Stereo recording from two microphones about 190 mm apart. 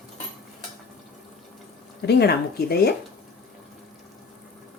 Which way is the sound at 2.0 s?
60° left (ahead or behind).